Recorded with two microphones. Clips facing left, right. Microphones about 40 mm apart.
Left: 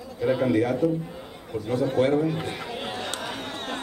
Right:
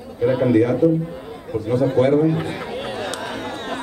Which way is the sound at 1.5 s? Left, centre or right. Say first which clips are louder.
Right 6 dB; right.